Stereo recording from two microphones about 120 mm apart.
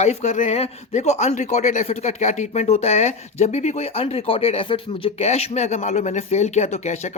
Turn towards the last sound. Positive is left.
turn(degrees=70)  # may be behind; listen again after turning